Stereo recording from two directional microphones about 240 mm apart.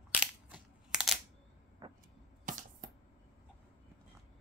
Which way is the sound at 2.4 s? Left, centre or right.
Right.